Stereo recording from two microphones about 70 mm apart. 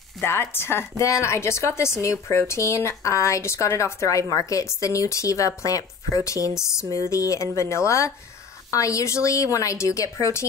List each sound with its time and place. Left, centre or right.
0.2 s a woman's voice: left